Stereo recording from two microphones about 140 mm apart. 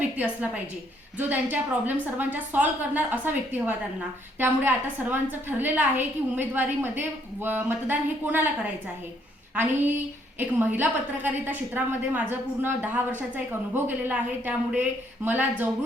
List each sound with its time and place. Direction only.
0.0 s a woman's voice: 10° right (ahead or behind)
10.3 s a woman's voice: 15° right (ahead or behind)